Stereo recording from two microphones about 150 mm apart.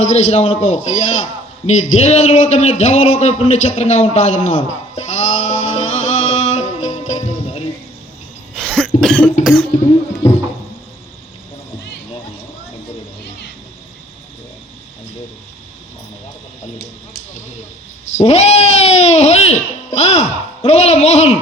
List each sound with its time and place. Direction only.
0.0 s a man's voice: 50° left (ahead or behind)
8.6 s cough: 5° left (ahead or behind)
9.8 s music: 40° left (ahead or behind)
18.2 s music: 45° left (ahead or behind)